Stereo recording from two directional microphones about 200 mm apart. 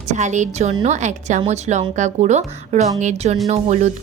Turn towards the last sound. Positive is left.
turn(degrees=-35)  # may be behind; listen again after turning